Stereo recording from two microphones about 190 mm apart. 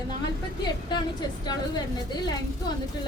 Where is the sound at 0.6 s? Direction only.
20° left (ahead or behind).